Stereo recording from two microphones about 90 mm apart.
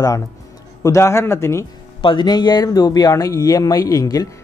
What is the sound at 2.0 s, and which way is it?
Speech, 60° left (ahead or behind).